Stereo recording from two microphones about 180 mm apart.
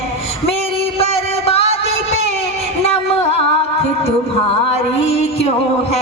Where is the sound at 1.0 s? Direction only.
35° left (ahead or behind).